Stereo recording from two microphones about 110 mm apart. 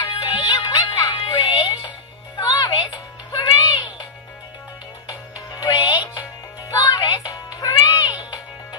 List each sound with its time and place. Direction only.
0.2 s music: 45° left (ahead or behind)